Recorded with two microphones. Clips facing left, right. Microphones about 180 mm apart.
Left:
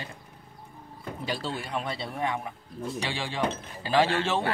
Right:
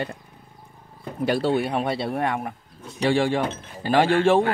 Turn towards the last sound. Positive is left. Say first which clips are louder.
# right 7 dB
turn(degrees=-55)  # may be behind; listen again after turning